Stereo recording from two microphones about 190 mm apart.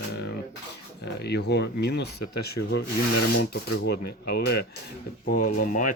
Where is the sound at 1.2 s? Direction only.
60° left (ahead or behind).